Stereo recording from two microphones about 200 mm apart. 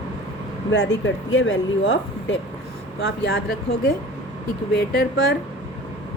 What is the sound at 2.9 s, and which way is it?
Speech, 60° left (ahead or behind).